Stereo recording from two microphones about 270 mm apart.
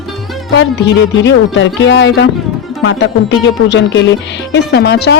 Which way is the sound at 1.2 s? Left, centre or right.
Left.